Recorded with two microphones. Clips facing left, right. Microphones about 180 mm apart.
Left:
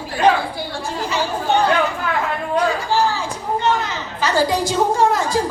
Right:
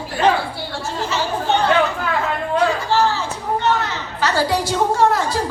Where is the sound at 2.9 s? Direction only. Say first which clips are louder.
Right 1 dB; 10° left (ahead or behind).